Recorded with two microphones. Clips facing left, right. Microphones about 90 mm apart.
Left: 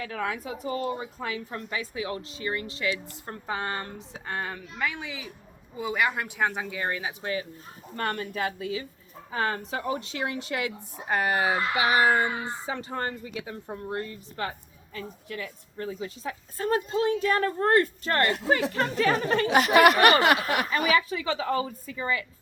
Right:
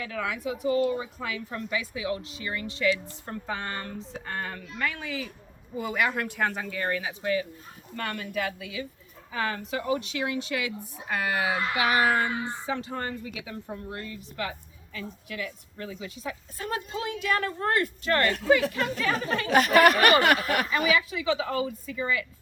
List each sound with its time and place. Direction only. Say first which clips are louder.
0.0 s a woman's voice: even; 35° left (ahead or behind)
19.5 s speech: even; 15° left (ahead or behind)
20.7 s a woman's voice: left 1 dB; 40° left (ahead or behind)